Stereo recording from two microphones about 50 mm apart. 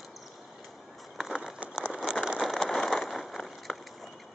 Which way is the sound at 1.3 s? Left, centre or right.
Centre.